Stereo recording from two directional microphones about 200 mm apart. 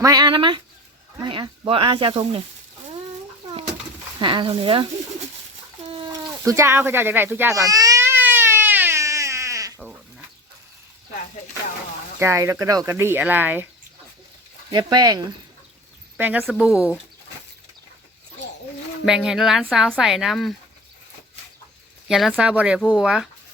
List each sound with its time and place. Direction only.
0.0 s speech: 20° right (ahead or behind)
4.2 s speech: 25° right (ahead or behind)
5.9 s chicken: 25° right (ahead or behind)
6.5 s baby cry: 15° right (ahead or behind)
12.2 s speech: 15° right (ahead or behind)
14.7 s speech: 20° right (ahead or behind)
16.1 s speech: 10° right (ahead or behind)
19.0 s speech: 5° right (ahead or behind)
22.1 s speech: 5° right (ahead or behind)